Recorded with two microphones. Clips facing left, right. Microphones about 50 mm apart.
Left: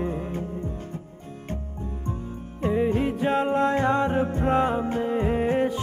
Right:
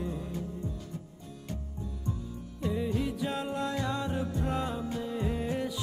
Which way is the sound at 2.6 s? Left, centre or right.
Left.